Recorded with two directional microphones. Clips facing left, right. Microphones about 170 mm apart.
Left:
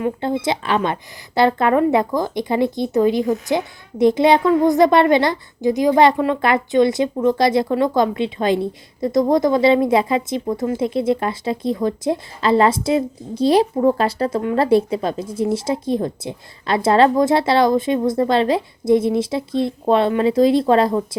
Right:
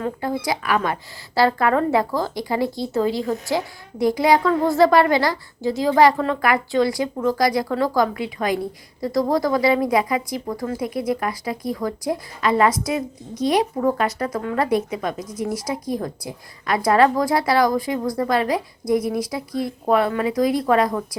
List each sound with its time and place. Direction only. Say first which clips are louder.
0.0 s speech: left 4 dB; 25° left (ahead or behind)